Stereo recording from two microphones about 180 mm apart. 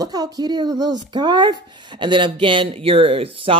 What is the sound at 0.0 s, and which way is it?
Speech, 20° right (ahead or behind).